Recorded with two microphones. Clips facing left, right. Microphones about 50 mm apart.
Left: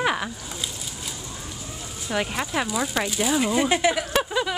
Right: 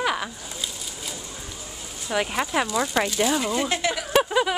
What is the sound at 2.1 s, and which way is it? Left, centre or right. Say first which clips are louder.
Speech: right 2 dB; centre.